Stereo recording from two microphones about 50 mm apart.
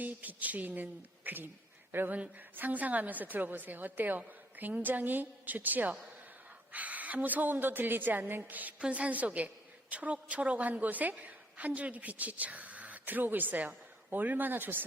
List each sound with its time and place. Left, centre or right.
0.0 s a woman's voice: right
2.1 s a woman's voice: right